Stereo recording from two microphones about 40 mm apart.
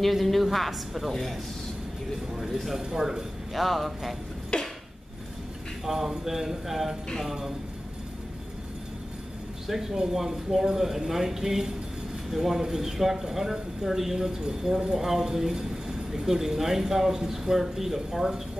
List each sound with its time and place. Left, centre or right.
0.0 s a man's voice: centre
4.5 s a sound: left
5.9 s speech: centre
9.7 s speech: centre